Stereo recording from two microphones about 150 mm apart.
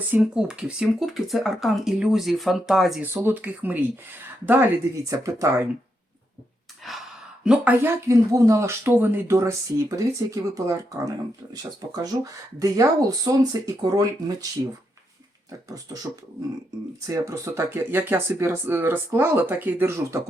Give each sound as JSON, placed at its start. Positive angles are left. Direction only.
{"t": 0.1, "sound": "speech", "side_deg": -5}
{"t": 3.0, "sound": "speech", "side_deg": -15}
{"t": 7.4, "sound": "speech", "side_deg": -10}
{"t": 17.0, "sound": "speech", "side_deg": -20}